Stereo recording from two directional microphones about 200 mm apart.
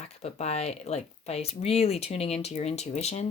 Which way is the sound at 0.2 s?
35° left (ahead or behind).